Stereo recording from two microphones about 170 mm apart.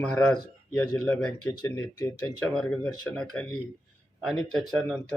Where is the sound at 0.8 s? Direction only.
5° left (ahead or behind).